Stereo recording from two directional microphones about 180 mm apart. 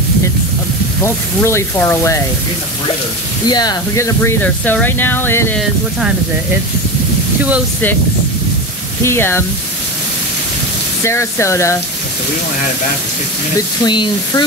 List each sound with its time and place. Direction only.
1.0 s speech: 15° left (ahead or behind)
3.4 s speech: 20° left (ahead or behind)
5.6 s speech: 5° right (ahead or behind)
9.0 s speech: 15° left (ahead or behind)
11.1 s speech: 15° left (ahead or behind)
13.8 s speech: 25° left (ahead or behind)